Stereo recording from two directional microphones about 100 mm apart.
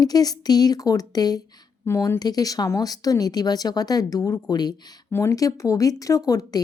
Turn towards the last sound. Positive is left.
turn(degrees=40)  # may be behind; listen again after turning